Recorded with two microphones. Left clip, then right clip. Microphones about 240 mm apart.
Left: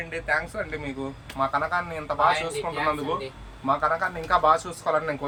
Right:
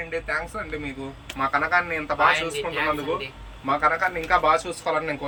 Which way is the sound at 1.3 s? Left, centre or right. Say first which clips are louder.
Right 3 dB; left.